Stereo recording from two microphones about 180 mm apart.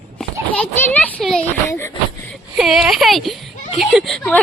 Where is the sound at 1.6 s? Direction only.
15° left (ahead or behind).